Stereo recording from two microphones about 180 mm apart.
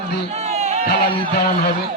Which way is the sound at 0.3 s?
40° right (ahead or behind).